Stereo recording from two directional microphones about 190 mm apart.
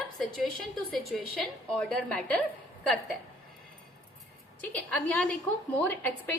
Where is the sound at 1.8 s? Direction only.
5° left (ahead or behind).